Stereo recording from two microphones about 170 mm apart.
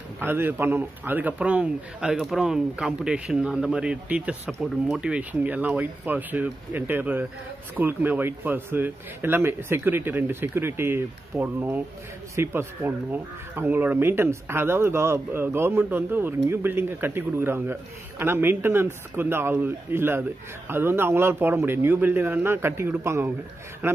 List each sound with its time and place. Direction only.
0.2 s speech: 10° right (ahead or behind)